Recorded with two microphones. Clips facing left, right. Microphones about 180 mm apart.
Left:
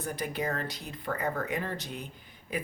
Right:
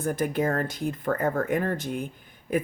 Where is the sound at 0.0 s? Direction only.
50° right (ahead or behind).